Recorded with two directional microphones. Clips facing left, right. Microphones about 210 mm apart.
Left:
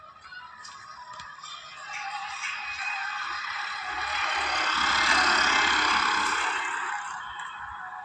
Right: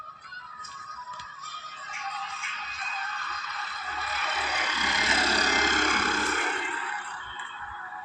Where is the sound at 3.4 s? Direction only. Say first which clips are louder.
Right 1 dB; 5° left (ahead or behind); by 6.4 s 50° right (ahead or behind).